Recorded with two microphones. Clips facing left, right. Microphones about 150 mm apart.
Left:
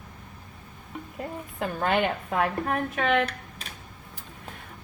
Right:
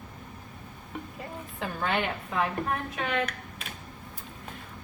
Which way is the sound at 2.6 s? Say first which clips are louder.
Left 5 dB; 65° left (ahead or behind).